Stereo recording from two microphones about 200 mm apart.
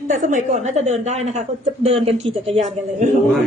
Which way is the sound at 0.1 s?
40° right (ahead or behind).